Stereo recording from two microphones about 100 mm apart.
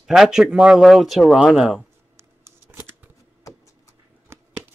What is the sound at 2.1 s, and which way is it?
Scissors, 25° right (ahead or behind).